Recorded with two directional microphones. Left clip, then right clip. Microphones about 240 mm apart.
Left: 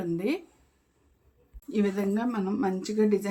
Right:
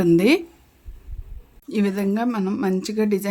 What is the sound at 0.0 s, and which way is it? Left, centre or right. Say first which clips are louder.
Speech: right 13 dB; right.